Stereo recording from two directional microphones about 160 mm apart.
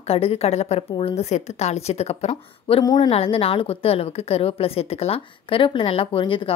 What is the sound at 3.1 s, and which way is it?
A woman's voice, 35° left (ahead or behind).